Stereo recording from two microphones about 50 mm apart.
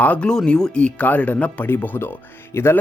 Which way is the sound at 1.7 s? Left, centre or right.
Left.